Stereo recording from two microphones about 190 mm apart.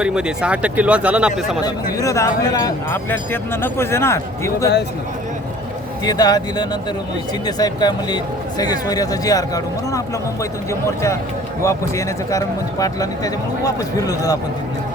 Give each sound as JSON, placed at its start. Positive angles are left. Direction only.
{"t": 0.0, "sound": "speech", "side_deg": -5}
{"t": 1.6, "sound": "speech", "side_deg": 15}
{"t": 6.1, "sound": "speech", "side_deg": 20}
{"t": 10.7, "sound": "speech", "side_deg": 15}